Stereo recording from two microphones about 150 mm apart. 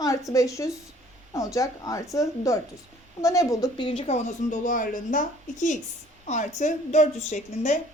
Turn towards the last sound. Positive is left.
turn(degrees=55)  # may be behind; listen again after turning